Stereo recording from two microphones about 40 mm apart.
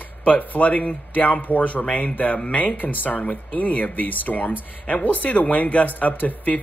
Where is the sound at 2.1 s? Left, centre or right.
Left.